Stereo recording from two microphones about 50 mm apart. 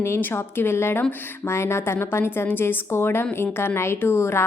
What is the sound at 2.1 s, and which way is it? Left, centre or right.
A woman's voice, left.